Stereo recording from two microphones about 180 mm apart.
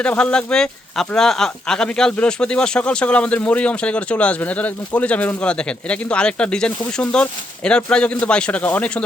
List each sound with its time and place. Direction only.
0.0 s speech: 5° left (ahead or behind)